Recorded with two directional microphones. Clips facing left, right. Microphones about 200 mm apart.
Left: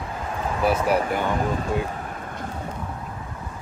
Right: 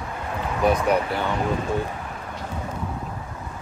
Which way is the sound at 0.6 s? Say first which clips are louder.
Right 2 dB; 5° left (ahead or behind).